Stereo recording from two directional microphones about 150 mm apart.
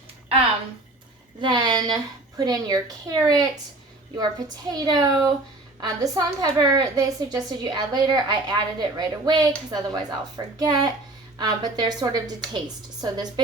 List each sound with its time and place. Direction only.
1.4 s a woman's voice: 30° right (ahead or behind)